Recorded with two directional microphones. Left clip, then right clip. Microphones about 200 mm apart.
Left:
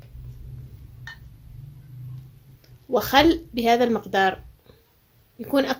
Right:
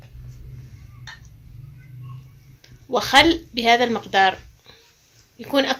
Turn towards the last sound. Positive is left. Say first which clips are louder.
# right 2 dB
turn(degrees=50)  # may be behind; listen again after turning